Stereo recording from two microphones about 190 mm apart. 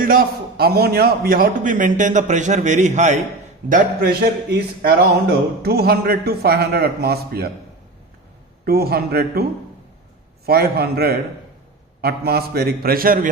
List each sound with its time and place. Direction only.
0.0 s a man's voice: 50° right (ahead or behind)
3.7 s a man's voice: 50° right (ahead or behind)
8.6 s a man's voice: 55° right (ahead or behind)